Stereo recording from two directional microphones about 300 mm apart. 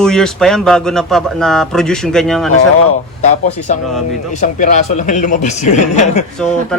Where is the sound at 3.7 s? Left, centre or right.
Left.